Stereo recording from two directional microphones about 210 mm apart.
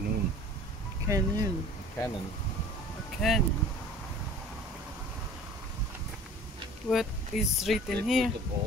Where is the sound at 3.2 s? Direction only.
Centre (ahead or behind).